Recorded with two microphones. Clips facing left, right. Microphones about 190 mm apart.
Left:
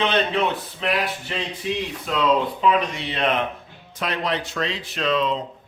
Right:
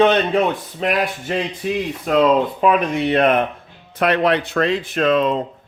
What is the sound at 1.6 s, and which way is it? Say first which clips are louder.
A man's voice: right 5 dB; 50° right (ahead or behind).